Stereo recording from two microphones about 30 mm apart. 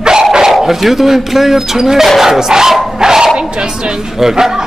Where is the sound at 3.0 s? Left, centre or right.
Right.